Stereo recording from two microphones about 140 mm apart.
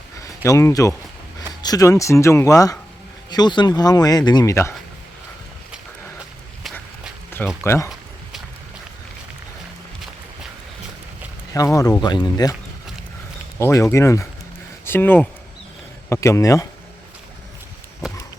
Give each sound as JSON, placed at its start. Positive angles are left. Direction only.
{"t": 0.2, "sound": "speech", "side_deg": 20}
{"t": 7.6, "sound": "speech", "side_deg": 15}
{"t": 11.5, "sound": "speech", "side_deg": 25}
{"t": 13.6, "sound": "speech", "side_deg": 20}